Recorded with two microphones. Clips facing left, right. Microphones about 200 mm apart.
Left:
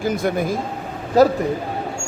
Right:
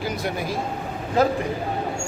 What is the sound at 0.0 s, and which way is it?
Speech, 50° left (ahead or behind).